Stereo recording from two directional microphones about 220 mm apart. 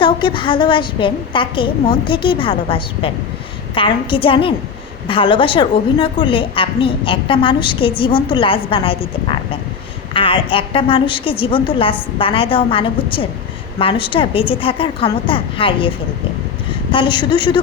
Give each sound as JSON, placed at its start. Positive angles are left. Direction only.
{"t": 0.0, "sound": "a woman's voice", "side_deg": 20}
{"t": 16.9, "sound": "a woman's voice", "side_deg": 20}